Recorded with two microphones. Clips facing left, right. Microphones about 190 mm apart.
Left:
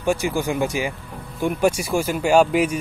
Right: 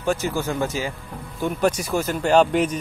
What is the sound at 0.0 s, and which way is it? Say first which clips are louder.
Speech: left 2 dB; 10° left (ahead or behind).